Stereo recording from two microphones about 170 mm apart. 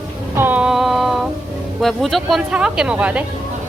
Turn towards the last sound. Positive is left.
turn(degrees=-5)  # may be behind; listen again after turning